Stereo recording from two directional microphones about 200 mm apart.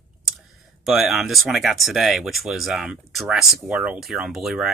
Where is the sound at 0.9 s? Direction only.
Centre (ahead or behind).